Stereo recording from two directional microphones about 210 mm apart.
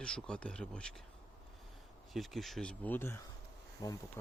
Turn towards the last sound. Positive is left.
turn(degrees=20)  # may be behind; listen again after turning